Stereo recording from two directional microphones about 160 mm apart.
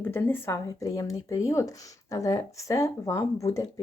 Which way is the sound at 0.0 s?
15° left (ahead or behind).